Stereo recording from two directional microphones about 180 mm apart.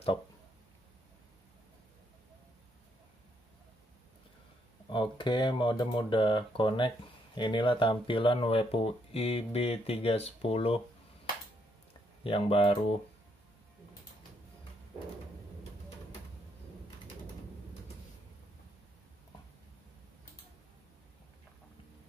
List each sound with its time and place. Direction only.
4.8 s speech: 25° left (ahead or behind)
12.2 s speech: 30° left (ahead or behind)